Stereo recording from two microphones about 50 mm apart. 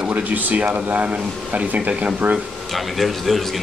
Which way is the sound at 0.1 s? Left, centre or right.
Right.